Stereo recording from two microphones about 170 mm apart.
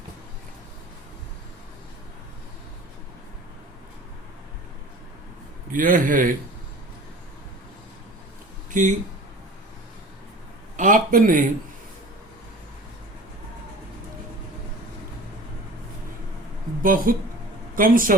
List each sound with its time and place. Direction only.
5.7 s a man's voice: 55° right (ahead or behind)
8.7 s speech: 50° right (ahead or behind)
10.8 s a man's voice: 50° right (ahead or behind)
16.8 s speech: 55° right (ahead or behind)